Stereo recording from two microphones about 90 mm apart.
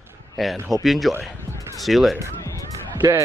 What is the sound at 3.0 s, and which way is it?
Speech, 35° right (ahead or behind).